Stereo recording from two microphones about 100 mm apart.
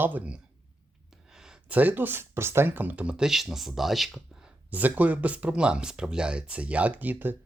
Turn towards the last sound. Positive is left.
turn(degrees=-20)  # may be behind; listen again after turning